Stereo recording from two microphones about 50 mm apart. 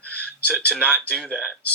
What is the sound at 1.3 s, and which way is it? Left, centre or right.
Speech, right.